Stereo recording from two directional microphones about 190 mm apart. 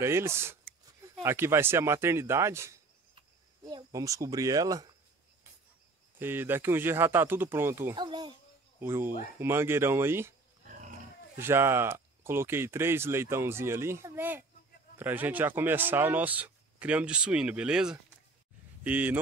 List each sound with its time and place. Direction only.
0.0 s speech: 15° right (ahead or behind)
3.2 s a sound: 20° right (ahead or behind)
6.1 s speech: 10° right (ahead or behind)
8.7 s speech: 10° right (ahead or behind)
11.3 s speech: 15° right (ahead or behind)